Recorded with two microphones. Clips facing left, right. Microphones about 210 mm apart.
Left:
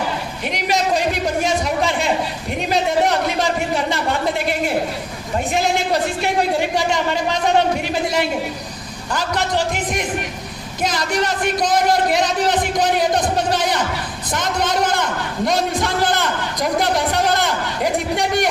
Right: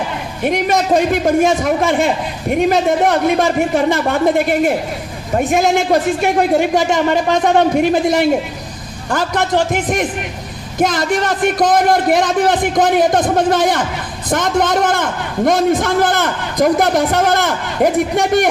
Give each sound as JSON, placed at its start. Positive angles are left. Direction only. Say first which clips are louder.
{"t": 0.4, "sound": "a man's voice", "louder": "right 6 dB", "side_deg": -50}